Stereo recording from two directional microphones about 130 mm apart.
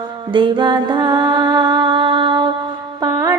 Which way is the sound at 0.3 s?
40° right (ahead or behind).